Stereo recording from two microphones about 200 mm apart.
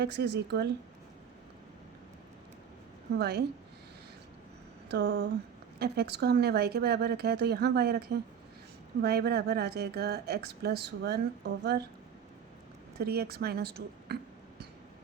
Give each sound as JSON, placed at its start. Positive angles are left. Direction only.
{"t": 0.0, "sound": "speech", "side_deg": -55}
{"t": 3.2, "sound": "speech", "side_deg": -55}
{"t": 4.9, "sound": "speech", "side_deg": -60}
{"t": 13.0, "sound": "speech", "side_deg": -50}